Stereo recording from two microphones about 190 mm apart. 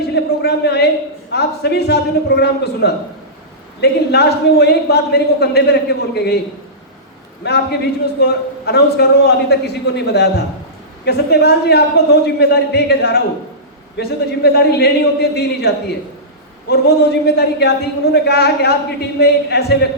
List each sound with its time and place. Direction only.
0.1 s a sound: 60° left (ahead or behind)
1.3 s a man's voice: 60° left (ahead or behind)
7.4 s a man's voice: 60° left (ahead or behind)